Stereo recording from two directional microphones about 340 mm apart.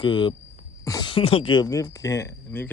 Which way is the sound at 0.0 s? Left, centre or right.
Centre.